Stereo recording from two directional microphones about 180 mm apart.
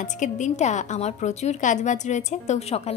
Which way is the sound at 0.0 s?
40° left (ahead or behind).